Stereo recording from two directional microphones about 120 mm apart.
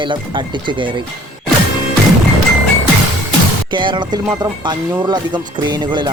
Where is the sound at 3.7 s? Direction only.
40° right (ahead or behind).